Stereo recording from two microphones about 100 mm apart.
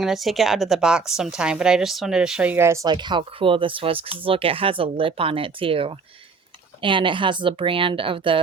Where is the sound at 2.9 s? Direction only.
50° right (ahead or behind).